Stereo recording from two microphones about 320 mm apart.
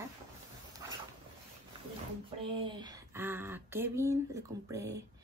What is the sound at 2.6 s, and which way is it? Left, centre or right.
Speech, centre.